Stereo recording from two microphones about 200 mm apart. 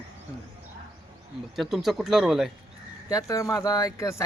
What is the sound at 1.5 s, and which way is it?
Speech, centre (ahead or behind).